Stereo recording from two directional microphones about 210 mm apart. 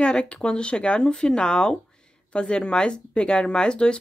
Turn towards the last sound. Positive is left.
turn(degrees=5)  # may be behind; listen again after turning